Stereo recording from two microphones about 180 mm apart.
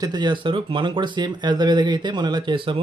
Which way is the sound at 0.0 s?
25° right (ahead or behind).